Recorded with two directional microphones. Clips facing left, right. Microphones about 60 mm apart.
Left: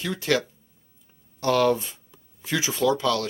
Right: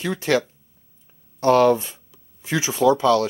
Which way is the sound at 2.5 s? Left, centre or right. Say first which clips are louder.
Right 5 dB; right.